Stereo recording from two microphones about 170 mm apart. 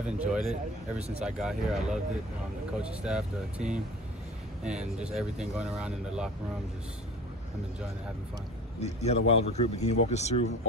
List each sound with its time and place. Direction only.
0.0 s speech: 5° right (ahead or behind)
0.9 s speech: 40° right (ahead or behind)
1.2 s speech: centre (ahead or behind)
8.8 s a man's voice: 40° left (ahead or behind)